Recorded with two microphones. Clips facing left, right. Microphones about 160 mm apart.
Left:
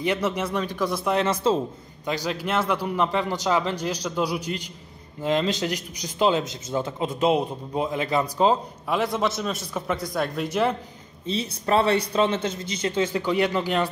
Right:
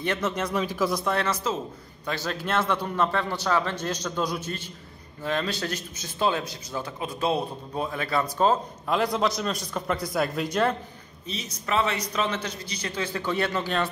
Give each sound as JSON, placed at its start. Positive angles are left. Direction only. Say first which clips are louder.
{"t": 0.0, "sound": "a man's voice", "louder": "left 3 dB", "side_deg": 10}
{"t": 0.6, "sound": "a man's voice", "louder": "even", "side_deg": -5}
{"t": 1.2, "sound": "a man's voice", "louder": "left 6 dB", "side_deg": 30}
{"t": 2.0, "sound": "a man's voice", "louder": "left 3 dB", "side_deg": 15}
{"t": 8.8, "sound": "a man's voice", "louder": "even", "side_deg": 5}
{"t": 11.2, "sound": "a man's voice", "louder": "left 7 dB", "side_deg": 30}